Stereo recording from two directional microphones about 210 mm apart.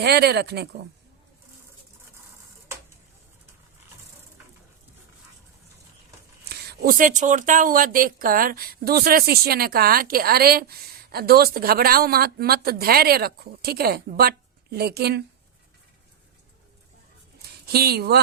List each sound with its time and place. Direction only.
0.0 s speech: 50° right (ahead or behind)
6.4 s speech: 50° right (ahead or behind)
17.7 s speech: 50° right (ahead or behind)